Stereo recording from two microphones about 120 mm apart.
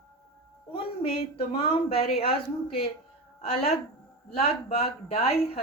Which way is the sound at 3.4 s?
65° left (ahead or behind).